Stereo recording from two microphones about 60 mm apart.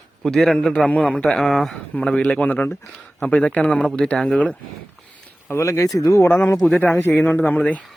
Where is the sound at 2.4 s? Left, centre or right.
Left.